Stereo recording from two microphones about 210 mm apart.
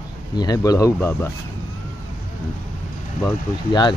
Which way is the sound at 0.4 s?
15° left (ahead or behind).